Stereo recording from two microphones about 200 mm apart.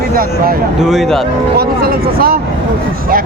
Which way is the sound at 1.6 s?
50° right (ahead or behind).